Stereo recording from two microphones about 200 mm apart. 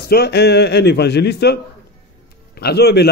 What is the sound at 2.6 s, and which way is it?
Speech, 55° left (ahead or behind).